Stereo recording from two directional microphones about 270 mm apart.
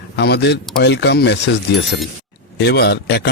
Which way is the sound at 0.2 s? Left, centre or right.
Left.